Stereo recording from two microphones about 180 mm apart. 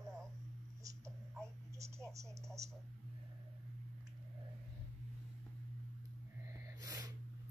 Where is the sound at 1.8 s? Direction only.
15° right (ahead or behind).